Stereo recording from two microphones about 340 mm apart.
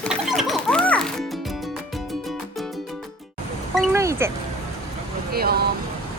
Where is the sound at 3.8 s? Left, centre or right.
Centre.